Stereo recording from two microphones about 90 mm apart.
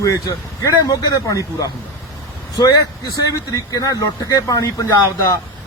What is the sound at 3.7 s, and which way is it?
Speech, 45° left (ahead or behind).